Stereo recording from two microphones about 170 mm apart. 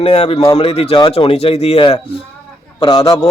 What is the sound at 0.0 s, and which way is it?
Speech, 35° left (ahead or behind).